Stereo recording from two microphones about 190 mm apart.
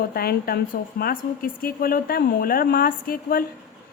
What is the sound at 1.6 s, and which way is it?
A woman's voice, 50° left (ahead or behind).